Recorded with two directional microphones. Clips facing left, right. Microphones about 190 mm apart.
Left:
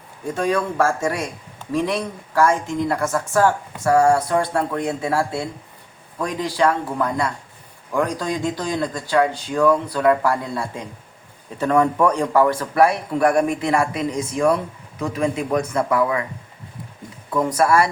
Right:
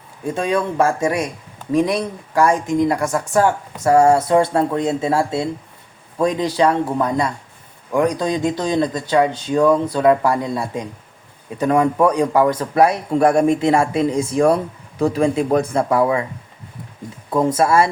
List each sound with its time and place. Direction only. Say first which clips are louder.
0.3 s a man's voice: right 2 dB; 25° right (ahead or behind)
17.3 s a man's voice: right 2 dB; 25° right (ahead or behind)